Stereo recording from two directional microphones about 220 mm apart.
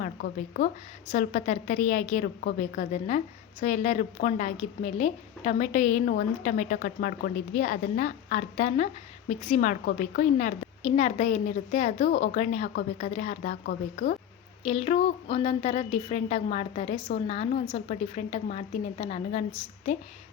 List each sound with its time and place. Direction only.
0.0 s a woman's voice: 40° left (ahead or behind)
14.7 s a woman's voice: 30° left (ahead or behind)